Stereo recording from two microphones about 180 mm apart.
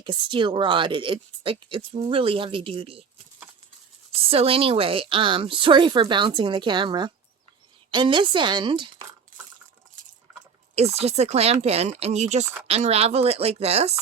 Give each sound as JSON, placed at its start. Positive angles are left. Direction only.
{"t": 0.0, "sound": "speech", "side_deg": -25}
{"t": 4.1, "sound": "speech", "side_deg": -30}
{"t": 9.3, "sound": "a sound", "side_deg": -45}
{"t": 10.8, "sound": "speech", "side_deg": -35}